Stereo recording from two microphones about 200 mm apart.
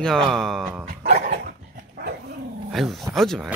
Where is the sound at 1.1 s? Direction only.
50° right (ahead or behind).